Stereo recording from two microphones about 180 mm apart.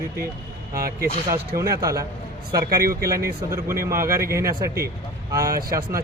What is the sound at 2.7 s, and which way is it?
Speech, 55° right (ahead or behind).